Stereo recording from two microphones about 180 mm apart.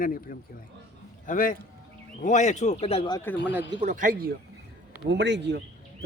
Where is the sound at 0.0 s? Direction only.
50° left (ahead or behind); by 3.2 s 30° left (ahead or behind).